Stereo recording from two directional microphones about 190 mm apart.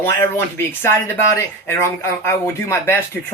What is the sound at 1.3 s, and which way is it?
Speech, 15° left (ahead or behind).